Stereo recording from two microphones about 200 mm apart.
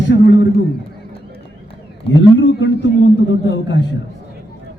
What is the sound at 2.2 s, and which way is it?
A man's voice, 60° left (ahead or behind).